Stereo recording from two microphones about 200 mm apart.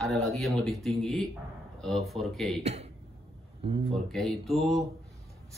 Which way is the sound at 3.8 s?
Centre (ahead or behind).